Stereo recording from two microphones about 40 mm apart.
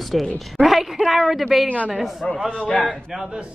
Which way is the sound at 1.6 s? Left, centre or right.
Left.